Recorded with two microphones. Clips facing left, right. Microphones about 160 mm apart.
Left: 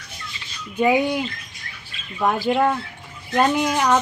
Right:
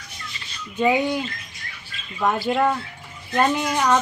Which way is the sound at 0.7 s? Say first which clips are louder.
Left 2 dB; 10° left (ahead or behind).